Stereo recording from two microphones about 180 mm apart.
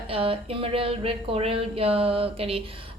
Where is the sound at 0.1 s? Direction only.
30° right (ahead or behind).